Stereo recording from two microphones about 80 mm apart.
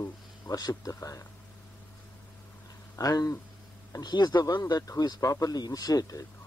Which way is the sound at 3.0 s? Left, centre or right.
Left.